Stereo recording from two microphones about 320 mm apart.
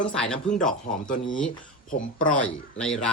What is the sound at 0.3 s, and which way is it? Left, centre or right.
Speech, left.